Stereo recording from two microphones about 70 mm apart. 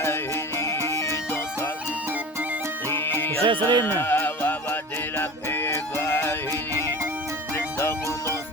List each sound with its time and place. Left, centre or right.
0.0 s music: left
2.9 s music: left
3.4 s music: right
3.8 s music: left